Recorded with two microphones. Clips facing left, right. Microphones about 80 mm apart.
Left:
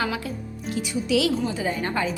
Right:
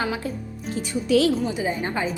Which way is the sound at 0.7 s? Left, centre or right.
Right.